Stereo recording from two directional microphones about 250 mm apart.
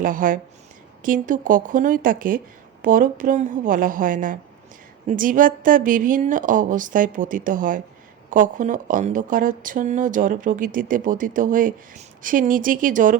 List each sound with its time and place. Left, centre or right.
0.0 s a woman's voice: right